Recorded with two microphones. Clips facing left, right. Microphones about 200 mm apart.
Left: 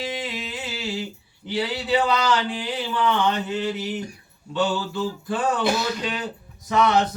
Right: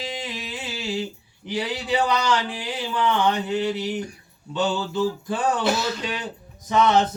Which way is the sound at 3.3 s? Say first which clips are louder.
Right 2 dB; 15° right (ahead or behind).